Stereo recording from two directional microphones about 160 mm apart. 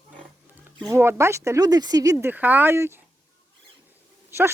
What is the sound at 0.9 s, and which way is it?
Speech, 15° right (ahead or behind).